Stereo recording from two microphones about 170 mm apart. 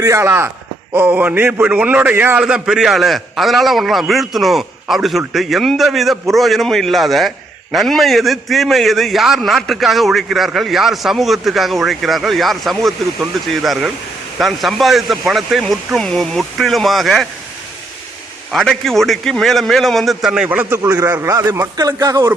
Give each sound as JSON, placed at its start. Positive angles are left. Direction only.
{"t": 0.0, "sound": "a man's voice", "side_deg": -15}
{"t": 18.5, "sound": "a man's voice", "side_deg": 0}